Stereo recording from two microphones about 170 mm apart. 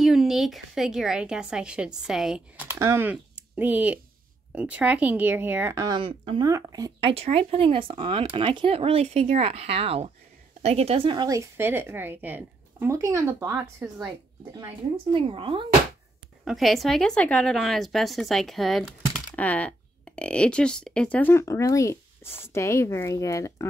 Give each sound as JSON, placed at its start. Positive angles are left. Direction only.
{"t": 0.0, "sound": "a woman's voice", "side_deg": 0}
{"t": 2.7, "sound": "a woman's voice", "side_deg": -15}
{"t": 15.1, "sound": "speech", "side_deg": -30}
{"t": 16.4, "sound": "a woman's voice", "side_deg": 0}